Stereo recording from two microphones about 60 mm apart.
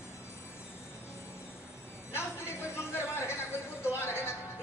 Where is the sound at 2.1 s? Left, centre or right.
Left.